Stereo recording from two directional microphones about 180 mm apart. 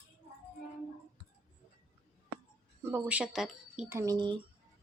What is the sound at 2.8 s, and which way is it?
Speech, 10° right (ahead or behind).